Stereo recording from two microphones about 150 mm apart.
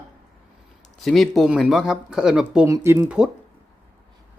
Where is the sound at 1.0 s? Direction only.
Centre (ahead or behind).